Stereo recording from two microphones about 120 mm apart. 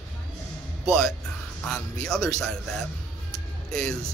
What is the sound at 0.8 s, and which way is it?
Speech, 5° left (ahead or behind).